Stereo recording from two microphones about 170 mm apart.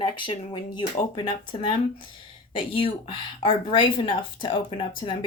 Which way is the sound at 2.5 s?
30° left (ahead or behind).